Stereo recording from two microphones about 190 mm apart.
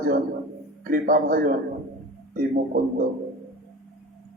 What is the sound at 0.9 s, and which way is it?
Speech, 45° right (ahead or behind).